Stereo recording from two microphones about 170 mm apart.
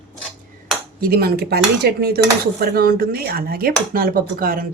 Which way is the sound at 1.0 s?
65° right (ahead or behind).